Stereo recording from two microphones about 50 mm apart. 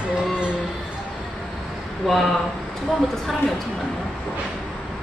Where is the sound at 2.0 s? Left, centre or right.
Centre.